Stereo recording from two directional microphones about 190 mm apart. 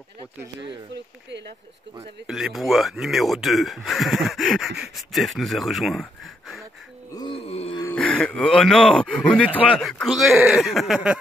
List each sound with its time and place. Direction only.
0.9 s speech: 65° right (ahead or behind)
2.0 s speech: 5° right (ahead or behind)
7.1 s wail: 25° left (ahead or behind)
7.8 s speech: 10° left (ahead or behind)